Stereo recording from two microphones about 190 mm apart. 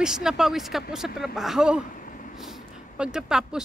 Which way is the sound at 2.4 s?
5° right (ahead or behind).